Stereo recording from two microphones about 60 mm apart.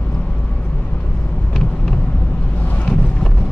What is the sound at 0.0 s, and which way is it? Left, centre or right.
Vehicle, left.